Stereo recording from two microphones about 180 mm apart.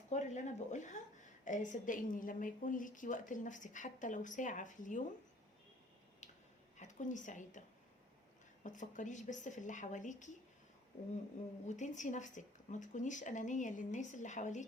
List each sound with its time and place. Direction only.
0.1 s a woman's voice: 40° left (ahead or behind)
6.7 s a woman's voice: 45° left (ahead or behind)
8.6 s a woman's voice: 45° left (ahead or behind)
11.7 s a woman's voice: 45° left (ahead or behind)